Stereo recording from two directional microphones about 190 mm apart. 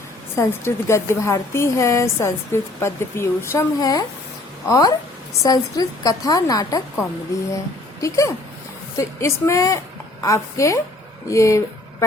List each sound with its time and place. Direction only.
0.3 s a woman's voice: 15° left (ahead or behind)
8.0 s speech: 15° left (ahead or behind)